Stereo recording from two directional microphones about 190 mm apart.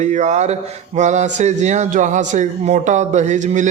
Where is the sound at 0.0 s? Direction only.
40° right (ahead or behind).